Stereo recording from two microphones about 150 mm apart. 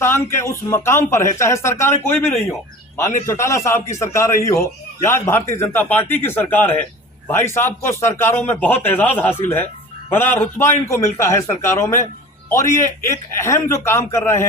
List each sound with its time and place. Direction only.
0.0 s a man's voice: 15° left (ahead or behind)